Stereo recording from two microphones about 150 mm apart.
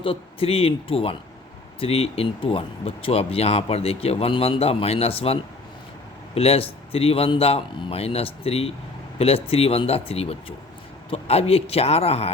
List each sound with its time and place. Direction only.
0.0 s speech: 35° left (ahead or behind)